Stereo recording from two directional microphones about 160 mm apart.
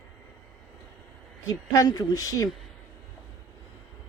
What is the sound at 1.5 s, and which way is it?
Speech, 20° left (ahead or behind).